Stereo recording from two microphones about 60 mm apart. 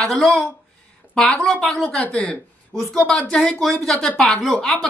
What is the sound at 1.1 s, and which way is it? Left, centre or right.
Speech, centre.